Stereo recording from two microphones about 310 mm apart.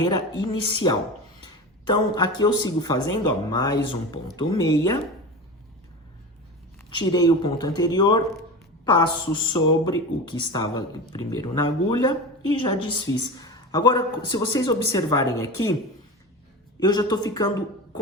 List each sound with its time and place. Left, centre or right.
0.0 s speech: centre
1.9 s speech: centre
6.9 s speech: centre
16.8 s speech: centre